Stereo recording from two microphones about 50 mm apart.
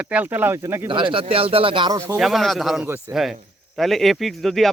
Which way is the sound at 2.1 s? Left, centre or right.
Centre.